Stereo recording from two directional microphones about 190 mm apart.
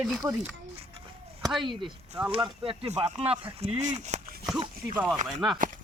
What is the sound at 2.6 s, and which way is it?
Speech, 30° right (ahead or behind).